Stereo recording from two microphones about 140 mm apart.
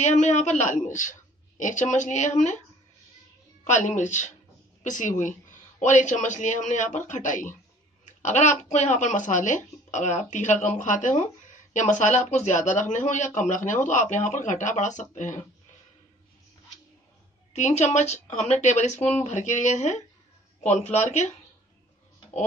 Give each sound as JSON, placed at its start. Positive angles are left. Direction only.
{"t": 0.0, "sound": "speech", "side_deg": 60}
{"t": 3.6, "sound": "a woman's voice", "side_deg": 60}
{"t": 17.5, "sound": "a woman's voice", "side_deg": 55}